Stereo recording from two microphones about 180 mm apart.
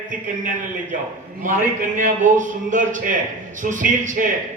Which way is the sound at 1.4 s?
45° right (ahead or behind).